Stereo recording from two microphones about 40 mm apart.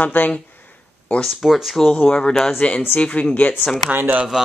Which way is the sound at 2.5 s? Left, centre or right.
Left.